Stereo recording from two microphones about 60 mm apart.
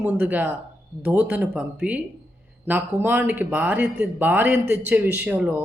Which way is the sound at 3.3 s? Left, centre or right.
Right.